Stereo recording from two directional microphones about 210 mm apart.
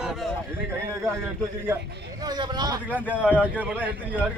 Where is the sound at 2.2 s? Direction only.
20° right (ahead or behind).